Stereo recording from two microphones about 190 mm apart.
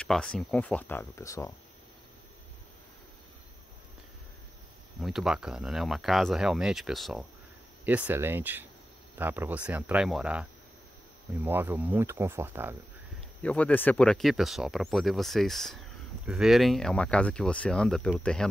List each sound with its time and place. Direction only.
0.0 s speech: 5° left (ahead or behind)
5.0 s speech: centre (ahead or behind)
13.4 s speech: 5° left (ahead or behind)